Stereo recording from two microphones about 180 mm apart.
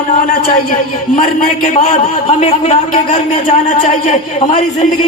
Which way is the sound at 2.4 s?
35° left (ahead or behind).